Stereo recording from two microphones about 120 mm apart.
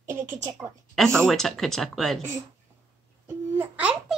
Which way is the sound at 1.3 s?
Centre (ahead or behind).